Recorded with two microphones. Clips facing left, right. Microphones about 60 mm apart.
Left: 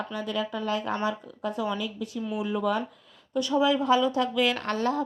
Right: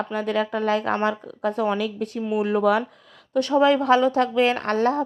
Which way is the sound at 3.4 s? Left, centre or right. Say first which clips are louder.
Right 5 dB; right.